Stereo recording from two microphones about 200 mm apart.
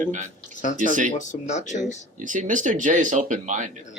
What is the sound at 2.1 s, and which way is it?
Speech, 40° right (ahead or behind).